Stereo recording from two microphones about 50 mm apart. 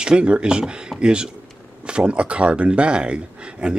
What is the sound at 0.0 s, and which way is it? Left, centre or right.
Speech, centre.